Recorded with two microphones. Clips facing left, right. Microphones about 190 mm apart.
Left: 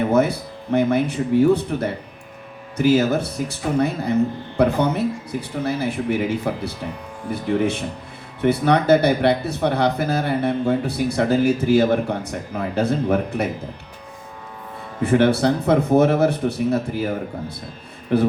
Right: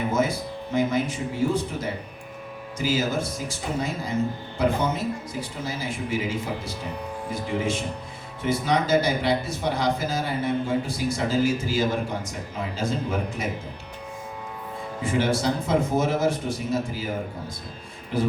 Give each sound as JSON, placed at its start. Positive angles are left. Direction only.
{"t": 0.1, "sound": "speech", "side_deg": 65}
{"t": 15.0, "sound": "speech", "side_deg": 65}
{"t": 18.1, "sound": "speech", "side_deg": 60}